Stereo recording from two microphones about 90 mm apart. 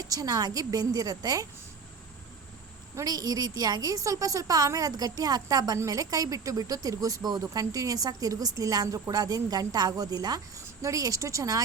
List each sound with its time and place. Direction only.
0.0 s a woman's voice: 40° right (ahead or behind)
2.9 s a woman's voice: 45° right (ahead or behind)